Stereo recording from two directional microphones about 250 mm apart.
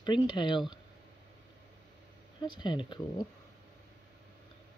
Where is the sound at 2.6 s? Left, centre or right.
Centre.